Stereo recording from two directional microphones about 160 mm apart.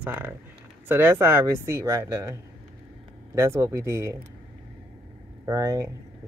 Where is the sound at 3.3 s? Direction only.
15° right (ahead or behind).